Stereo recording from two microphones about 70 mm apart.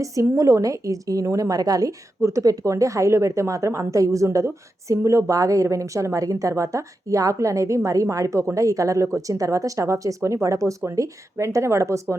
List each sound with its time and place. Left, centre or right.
0.0 s a woman's voice: right
2.2 s a woman's voice: right